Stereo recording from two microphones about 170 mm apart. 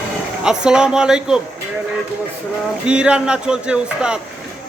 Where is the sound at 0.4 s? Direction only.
5° right (ahead or behind).